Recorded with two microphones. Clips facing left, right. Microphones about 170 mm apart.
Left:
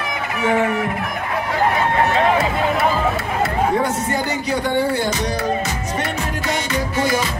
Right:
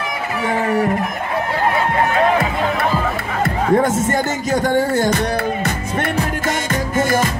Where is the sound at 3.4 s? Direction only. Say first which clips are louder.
Right 4 dB; 50° right (ahead or behind).